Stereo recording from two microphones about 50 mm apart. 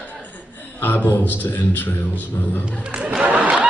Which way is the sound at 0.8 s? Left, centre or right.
Left.